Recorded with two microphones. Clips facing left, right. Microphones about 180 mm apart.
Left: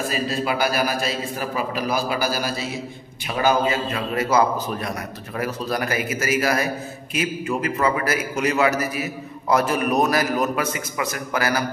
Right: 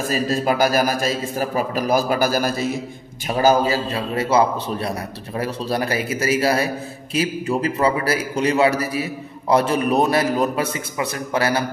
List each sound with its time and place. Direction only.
0.1 s a man's voice: 45° right (ahead or behind)
3.3 s a man's voice: 40° right (ahead or behind)